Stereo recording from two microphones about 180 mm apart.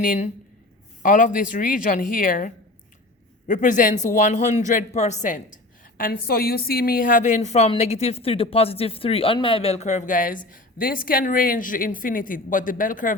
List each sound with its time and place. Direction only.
0.0 s speech: 50° left (ahead or behind)